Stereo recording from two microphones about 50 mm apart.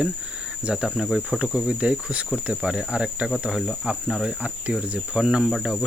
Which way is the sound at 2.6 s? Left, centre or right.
Centre.